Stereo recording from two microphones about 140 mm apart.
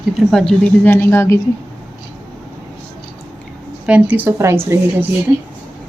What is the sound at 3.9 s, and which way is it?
A woman's voice, 10° right (ahead or behind).